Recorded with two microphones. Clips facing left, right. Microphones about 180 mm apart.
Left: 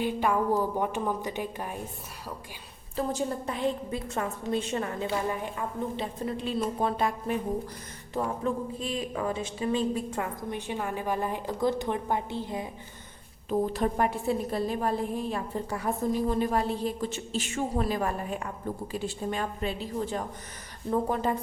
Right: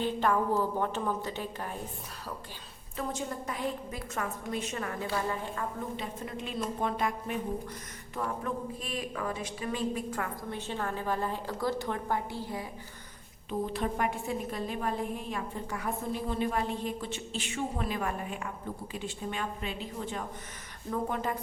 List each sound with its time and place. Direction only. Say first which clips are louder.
0.0 s a woman's voice: left 2 dB; 10° left (ahead or behind)
2.9 s a woman's voice: left 6 dB; 35° left (ahead or behind); by 5.6 s 15° left (ahead or behind)
6.0 s a woman's voice: left 5 dB; 35° left (ahead or behind)
13.5 s a woman's voice: left 5 dB; 40° left (ahead or behind)